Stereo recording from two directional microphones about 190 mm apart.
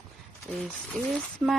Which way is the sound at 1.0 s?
Centre (ahead or behind).